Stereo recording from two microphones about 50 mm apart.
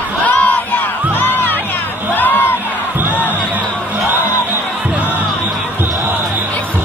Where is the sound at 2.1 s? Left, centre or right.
Left.